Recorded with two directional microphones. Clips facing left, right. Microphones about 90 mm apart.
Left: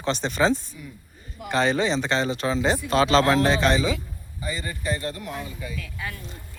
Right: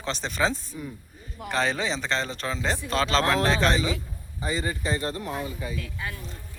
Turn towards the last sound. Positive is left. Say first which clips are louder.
# even
turn(degrees=-30)  # may be behind; listen again after turning